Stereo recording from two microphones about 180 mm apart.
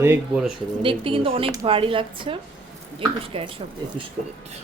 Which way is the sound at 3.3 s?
30° right (ahead or behind).